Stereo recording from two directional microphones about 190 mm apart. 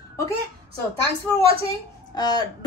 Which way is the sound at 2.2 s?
20° left (ahead or behind).